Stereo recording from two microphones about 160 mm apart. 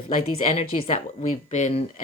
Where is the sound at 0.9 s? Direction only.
45° left (ahead or behind).